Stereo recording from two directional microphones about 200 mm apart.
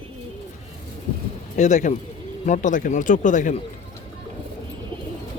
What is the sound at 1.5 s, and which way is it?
Speech, 35° left (ahead or behind).